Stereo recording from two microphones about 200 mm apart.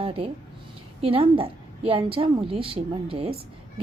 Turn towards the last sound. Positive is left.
turn(degrees=-30)  # may be behind; listen again after turning